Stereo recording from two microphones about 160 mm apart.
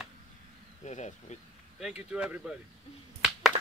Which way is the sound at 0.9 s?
45° left (ahead or behind).